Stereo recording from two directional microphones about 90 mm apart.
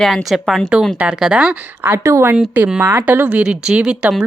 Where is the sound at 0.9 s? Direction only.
10° right (ahead or behind).